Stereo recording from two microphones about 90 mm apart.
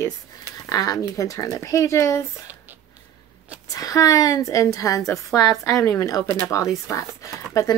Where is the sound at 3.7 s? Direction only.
40° left (ahead or behind).